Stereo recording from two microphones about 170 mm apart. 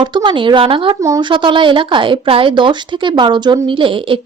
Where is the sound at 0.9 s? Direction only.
20° right (ahead or behind).